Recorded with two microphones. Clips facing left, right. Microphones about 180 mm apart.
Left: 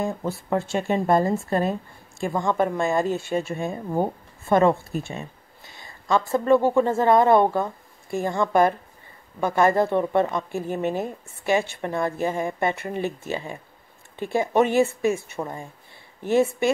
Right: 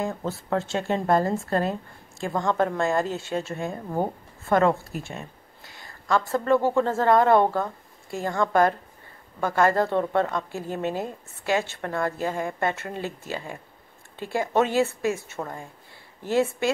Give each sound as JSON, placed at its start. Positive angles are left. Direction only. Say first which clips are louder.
{"t": 0.0, "sound": "a woman's voice", "louder": "left 2 dB", "side_deg": 15}